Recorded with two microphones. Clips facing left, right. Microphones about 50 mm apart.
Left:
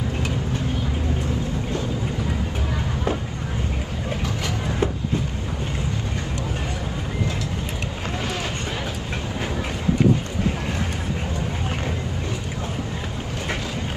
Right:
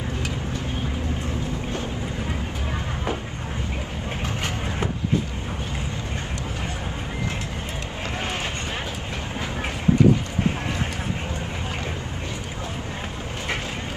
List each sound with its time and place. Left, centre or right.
4.2 s music: right